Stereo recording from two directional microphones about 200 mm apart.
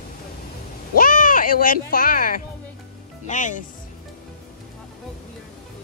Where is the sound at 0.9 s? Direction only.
45° left (ahead or behind).